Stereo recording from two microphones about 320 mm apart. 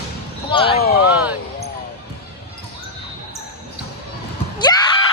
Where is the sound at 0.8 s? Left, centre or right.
Left.